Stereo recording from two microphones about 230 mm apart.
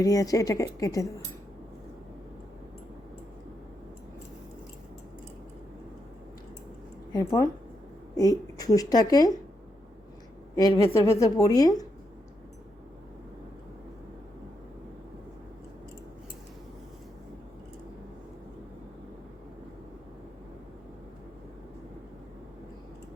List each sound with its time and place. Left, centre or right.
0.0 s speech: centre
7.1 s speech: centre
10.5 s speech: centre